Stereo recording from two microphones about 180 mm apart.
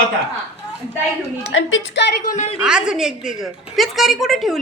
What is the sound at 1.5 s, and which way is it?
Speech, 85° left.